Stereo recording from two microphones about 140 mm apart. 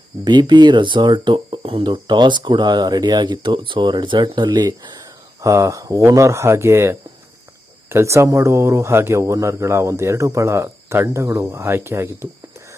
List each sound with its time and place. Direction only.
0.3 s speech: 30° right (ahead or behind)